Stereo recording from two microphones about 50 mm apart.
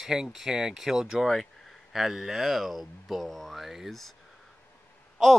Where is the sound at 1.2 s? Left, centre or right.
Centre.